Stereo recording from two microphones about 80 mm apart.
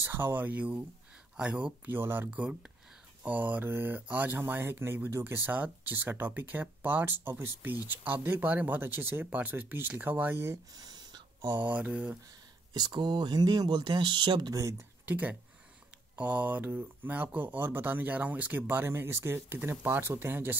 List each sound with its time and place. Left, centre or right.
0.0 s speech: right
2.0 s speech: right
10.7 s a sound: right
11.6 s speech: centre
12.7 s speech: right
14.5 s speech: right
15.0 s speech: right